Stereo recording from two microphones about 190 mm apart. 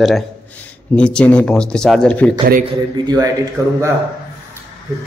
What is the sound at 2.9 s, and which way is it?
Speech, 20° right (ahead or behind).